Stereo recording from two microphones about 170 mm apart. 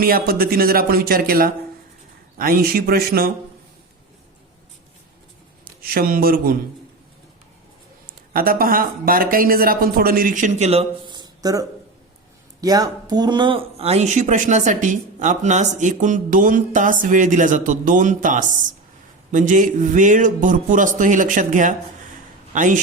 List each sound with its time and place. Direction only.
0.0 s speech: 60° right (ahead or behind)
5.8 s speech: 60° right (ahead or behind)
8.3 s speech: 60° right (ahead or behind); by 11.6 s 25° right (ahead or behind)
12.6 s speech: 20° right (ahead or behind); by 22.8 s 50° right (ahead or behind)